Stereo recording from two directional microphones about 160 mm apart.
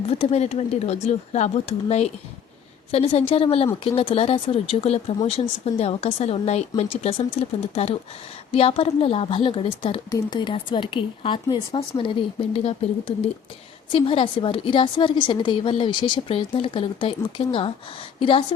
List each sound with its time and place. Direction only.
0.1 s a woman's voice: 40° left (ahead or behind)
8.5 s a woman's voice: 40° left (ahead or behind)